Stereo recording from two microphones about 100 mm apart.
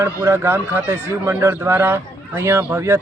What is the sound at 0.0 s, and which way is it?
Speech, 25° right (ahead or behind).